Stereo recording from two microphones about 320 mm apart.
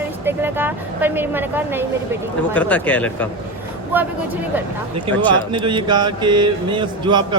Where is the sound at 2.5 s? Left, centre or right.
Centre.